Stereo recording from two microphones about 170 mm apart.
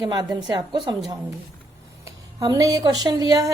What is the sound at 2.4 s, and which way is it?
A woman's voice, 20° right (ahead or behind).